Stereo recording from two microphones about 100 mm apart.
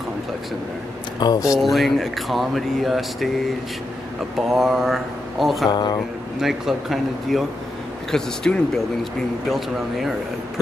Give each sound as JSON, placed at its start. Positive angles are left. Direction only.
{"t": 1.2, "sound": "speech", "side_deg": 45}
{"t": 1.6, "sound": "speech", "side_deg": 0}
{"t": 4.4, "sound": "speech", "side_deg": -5}
{"t": 5.7, "sound": "speech", "side_deg": 45}
{"t": 6.4, "sound": "speech", "side_deg": 0}